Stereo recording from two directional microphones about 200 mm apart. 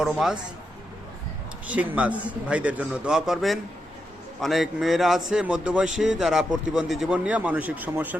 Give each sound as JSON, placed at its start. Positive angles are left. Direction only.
{"t": 0.0, "sound": "speech", "side_deg": 0}
{"t": 1.6, "sound": "speech", "side_deg": -5}